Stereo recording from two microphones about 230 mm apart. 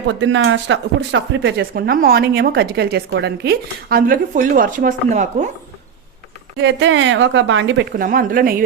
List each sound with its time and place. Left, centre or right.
0.1 s speech: right
6.6 s speech: right
7.9 s a woman's voice: right